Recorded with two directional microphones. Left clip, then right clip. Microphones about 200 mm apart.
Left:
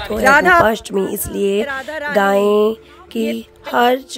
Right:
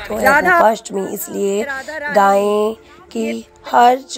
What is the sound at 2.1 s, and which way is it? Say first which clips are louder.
Speech: right 1 dB; 15° left (ahead or behind).